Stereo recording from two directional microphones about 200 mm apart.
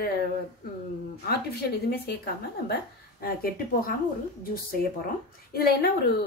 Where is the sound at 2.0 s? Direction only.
55° left (ahead or behind).